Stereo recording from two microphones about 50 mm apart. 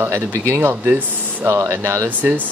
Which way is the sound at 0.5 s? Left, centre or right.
Right.